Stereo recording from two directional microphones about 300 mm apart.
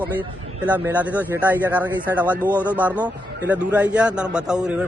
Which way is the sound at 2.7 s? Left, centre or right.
Centre.